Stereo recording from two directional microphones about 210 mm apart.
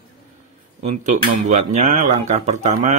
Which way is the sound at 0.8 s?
35° right (ahead or behind).